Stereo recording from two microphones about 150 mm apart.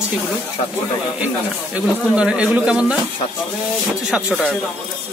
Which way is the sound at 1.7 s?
5° right (ahead or behind).